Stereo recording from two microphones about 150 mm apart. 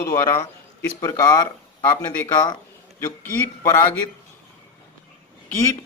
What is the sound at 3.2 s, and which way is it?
Speech, 15° left (ahead or behind).